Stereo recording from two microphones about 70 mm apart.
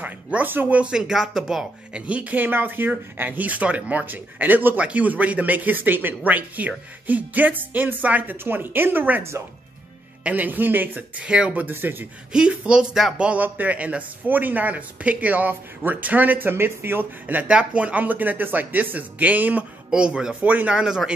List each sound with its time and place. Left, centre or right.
0.0 s speech: right; by 1.7 s centre
2.0 s speech: centre
10.2 s speech: right
11.6 s speech: right
12.3 s speech: centre
13.3 s speech: right